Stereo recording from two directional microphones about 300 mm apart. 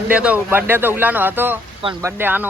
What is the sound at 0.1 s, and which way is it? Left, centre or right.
Speech, centre.